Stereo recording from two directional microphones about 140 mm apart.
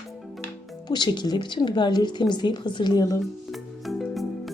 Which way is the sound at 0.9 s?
30° left (ahead or behind).